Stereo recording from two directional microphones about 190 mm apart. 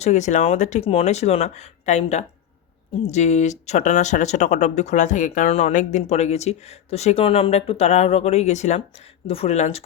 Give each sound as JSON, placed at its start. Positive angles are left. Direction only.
{"t": 0.0, "sound": "speech", "side_deg": 35}